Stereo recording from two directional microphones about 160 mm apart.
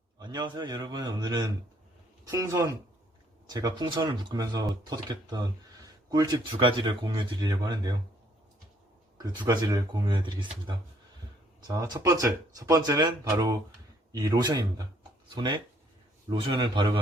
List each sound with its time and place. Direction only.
0.2 s speech: 25° right (ahead or behind)
9.1 s speech: 25° right (ahead or behind)